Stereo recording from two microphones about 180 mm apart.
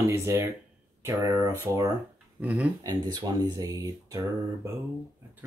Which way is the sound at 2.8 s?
20° right (ahead or behind).